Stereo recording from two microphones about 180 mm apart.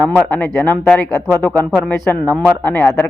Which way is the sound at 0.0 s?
10° left (ahead or behind).